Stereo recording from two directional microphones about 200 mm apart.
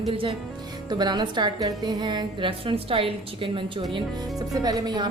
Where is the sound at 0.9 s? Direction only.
20° right (ahead or behind).